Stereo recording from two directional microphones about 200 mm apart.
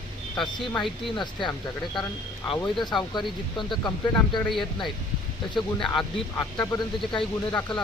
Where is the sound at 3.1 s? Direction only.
20° left (ahead or behind).